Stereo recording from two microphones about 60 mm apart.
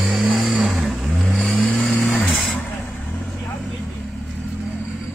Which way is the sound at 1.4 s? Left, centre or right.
Left.